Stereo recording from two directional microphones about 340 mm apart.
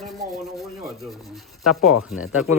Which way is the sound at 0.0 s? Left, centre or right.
Centre.